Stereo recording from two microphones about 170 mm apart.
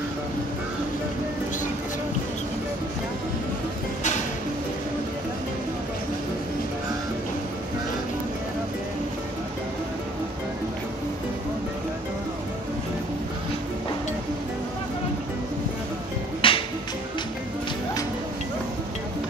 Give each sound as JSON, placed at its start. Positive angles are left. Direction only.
{"t": 16.3, "sound": "music", "side_deg": 30}